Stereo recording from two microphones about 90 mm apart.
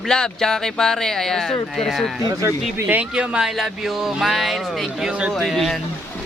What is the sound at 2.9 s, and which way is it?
Speech, 15° right (ahead or behind).